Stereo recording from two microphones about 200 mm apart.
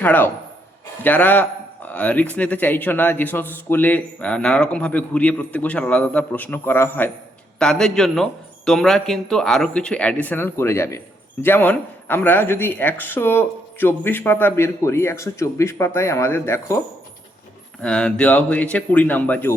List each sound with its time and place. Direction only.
0.0 s speech: 10° left (ahead or behind)